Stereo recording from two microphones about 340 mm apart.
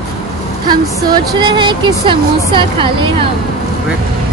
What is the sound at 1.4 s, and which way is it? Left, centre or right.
Speech, centre.